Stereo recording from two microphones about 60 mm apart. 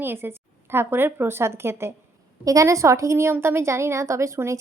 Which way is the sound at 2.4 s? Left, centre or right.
Right.